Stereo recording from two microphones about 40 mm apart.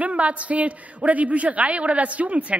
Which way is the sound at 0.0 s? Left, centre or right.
Right.